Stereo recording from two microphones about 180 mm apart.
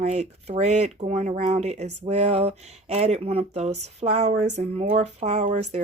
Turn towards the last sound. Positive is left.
turn(degrees=-40)  # may be behind; listen again after turning